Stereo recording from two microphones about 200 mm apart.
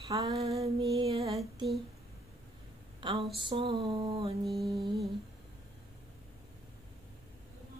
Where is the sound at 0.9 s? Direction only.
30° right (ahead or behind).